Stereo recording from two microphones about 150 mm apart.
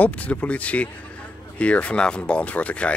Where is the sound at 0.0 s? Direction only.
10° left (ahead or behind).